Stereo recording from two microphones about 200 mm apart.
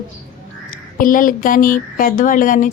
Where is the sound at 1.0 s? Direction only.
45° left (ahead or behind).